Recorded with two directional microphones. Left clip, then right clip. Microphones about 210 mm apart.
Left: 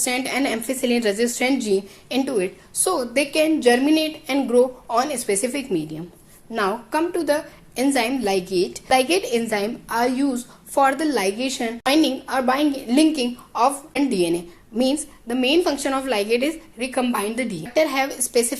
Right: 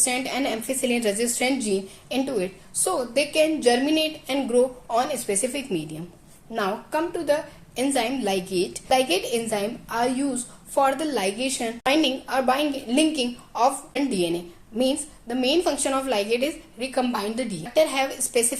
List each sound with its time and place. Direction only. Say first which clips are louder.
0.0 s a woman's voice: left 3 dB; 20° left (ahead or behind)